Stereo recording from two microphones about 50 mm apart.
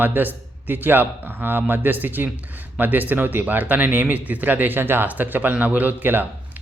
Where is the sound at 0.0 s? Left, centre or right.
Right.